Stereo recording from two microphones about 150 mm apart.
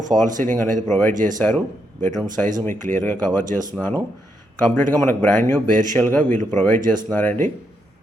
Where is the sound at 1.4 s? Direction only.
10° left (ahead or behind).